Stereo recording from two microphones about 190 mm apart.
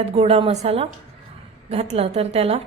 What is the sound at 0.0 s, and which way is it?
A woman's voice, 35° right (ahead or behind).